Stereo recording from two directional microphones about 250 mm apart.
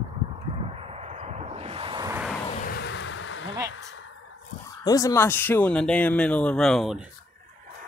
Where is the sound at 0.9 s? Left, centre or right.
Right.